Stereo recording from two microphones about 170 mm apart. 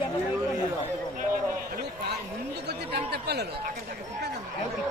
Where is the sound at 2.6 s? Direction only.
75° right (ahead or behind).